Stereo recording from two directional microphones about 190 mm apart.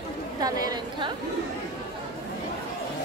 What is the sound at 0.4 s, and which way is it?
Speech, 20° right (ahead or behind).